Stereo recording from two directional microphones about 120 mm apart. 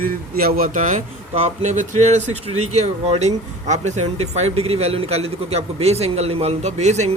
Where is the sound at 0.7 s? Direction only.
90° right.